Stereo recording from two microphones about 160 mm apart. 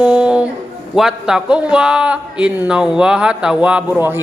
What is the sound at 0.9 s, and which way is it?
A man's voice, 5° right (ahead or behind).